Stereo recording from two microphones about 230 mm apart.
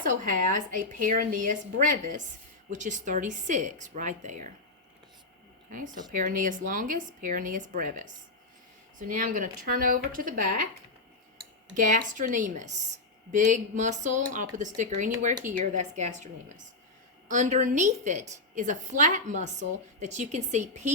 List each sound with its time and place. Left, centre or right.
0.0 s a woman's voice: right
5.7 s a woman's voice: right
11.7 s a woman's voice: right